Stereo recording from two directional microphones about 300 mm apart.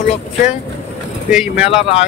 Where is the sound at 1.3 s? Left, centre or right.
Centre.